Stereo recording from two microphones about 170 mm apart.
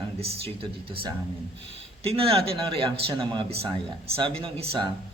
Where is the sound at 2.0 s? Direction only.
35° right (ahead or behind).